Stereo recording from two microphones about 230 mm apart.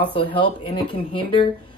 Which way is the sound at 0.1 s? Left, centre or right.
Left.